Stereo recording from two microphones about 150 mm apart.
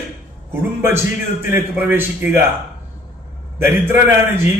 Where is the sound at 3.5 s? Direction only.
15° right (ahead or behind).